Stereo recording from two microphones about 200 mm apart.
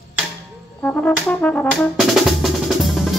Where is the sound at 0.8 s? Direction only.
5° left (ahead or behind).